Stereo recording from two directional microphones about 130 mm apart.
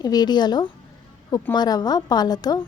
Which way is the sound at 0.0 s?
30° left (ahead or behind).